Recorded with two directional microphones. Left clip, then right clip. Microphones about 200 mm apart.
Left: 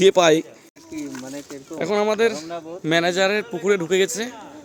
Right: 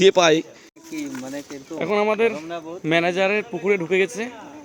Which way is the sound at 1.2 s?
55° right (ahead or behind).